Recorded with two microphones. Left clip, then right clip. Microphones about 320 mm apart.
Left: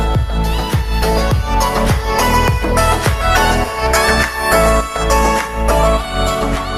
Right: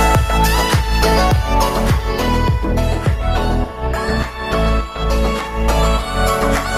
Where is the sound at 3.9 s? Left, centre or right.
Left.